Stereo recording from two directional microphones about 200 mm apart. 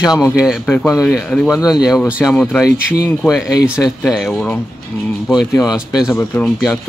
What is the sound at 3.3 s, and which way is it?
Speech, 5° right (ahead or behind).